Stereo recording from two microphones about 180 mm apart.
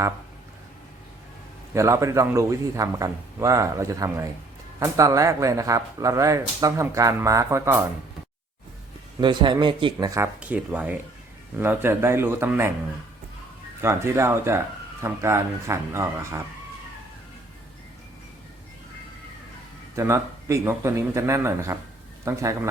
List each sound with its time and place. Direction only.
1.7 s speech: 15° right (ahead or behind)
9.2 s a man's voice: 25° right (ahead or behind)
10.2 s speech: 10° right (ahead or behind)
13.8 s speech: 15° right (ahead or behind)
20.0 s speech: 15° right (ahead or behind)